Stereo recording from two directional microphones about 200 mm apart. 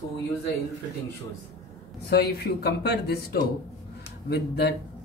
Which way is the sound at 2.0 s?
55° left (ahead or behind).